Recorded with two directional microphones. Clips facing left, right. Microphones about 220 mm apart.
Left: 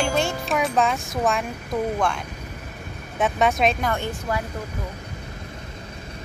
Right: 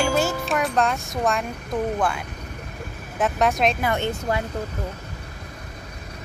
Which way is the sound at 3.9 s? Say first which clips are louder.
Right 2 dB; 20° right (ahead or behind).